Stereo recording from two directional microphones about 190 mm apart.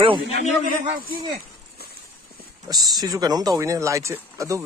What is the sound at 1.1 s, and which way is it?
Speech, 25° right (ahead or behind).